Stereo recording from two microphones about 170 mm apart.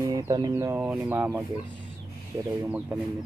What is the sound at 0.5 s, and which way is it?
Speech, 15° right (ahead or behind).